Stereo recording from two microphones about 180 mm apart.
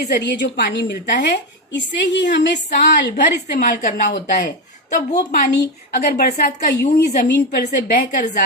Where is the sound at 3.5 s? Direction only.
45° left (ahead or behind).